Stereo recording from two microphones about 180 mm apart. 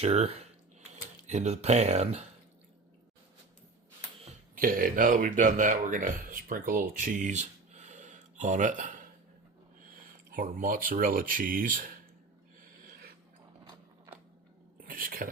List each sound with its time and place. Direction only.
0.0 s speech: 35° right (ahead or behind)
4.3 s speech: 50° right (ahead or behind)
14.8 s a sound: 50° right (ahead or behind)